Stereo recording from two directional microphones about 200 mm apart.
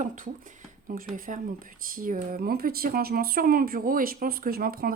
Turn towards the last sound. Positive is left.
turn(degrees=-45)  # may be behind; listen again after turning